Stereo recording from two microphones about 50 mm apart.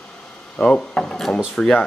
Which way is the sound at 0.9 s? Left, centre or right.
Centre.